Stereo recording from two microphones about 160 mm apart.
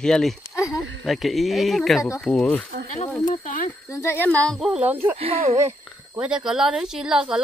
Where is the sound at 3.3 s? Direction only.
55° left (ahead or behind).